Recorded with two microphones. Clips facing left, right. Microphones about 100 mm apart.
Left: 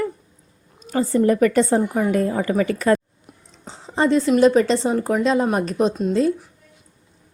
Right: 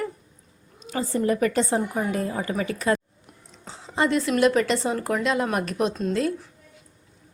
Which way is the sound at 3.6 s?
30° left (ahead or behind).